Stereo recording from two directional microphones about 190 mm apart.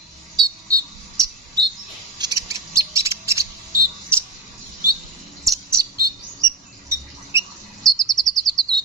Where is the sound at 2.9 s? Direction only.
15° right (ahead or behind).